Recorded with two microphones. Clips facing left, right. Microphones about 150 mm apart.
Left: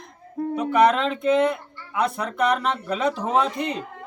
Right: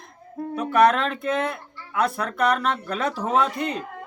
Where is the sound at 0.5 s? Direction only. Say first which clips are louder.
Even; 20° left (ahead or behind).